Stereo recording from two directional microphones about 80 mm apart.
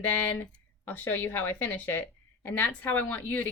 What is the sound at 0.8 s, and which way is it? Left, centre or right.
A woman's voice, left.